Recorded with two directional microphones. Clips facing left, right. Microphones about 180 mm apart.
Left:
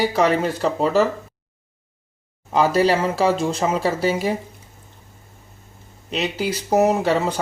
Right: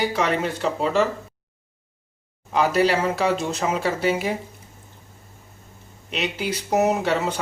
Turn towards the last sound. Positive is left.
turn(degrees=35)  # may be behind; listen again after turning